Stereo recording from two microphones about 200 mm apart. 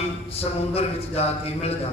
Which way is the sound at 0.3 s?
30° left (ahead or behind).